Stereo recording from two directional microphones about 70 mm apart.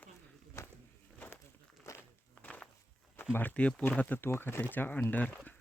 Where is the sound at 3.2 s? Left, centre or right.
Left.